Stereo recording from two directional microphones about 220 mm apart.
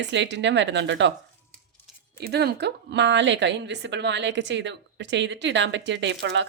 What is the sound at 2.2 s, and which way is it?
A woman's voice, 50° right (ahead or behind).